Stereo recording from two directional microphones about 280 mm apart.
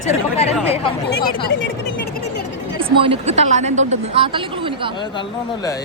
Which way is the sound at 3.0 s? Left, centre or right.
Right.